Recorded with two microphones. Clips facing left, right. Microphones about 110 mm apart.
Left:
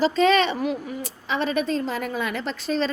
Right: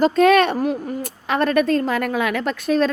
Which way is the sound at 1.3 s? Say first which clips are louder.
Right 6 dB; 55° right (ahead or behind).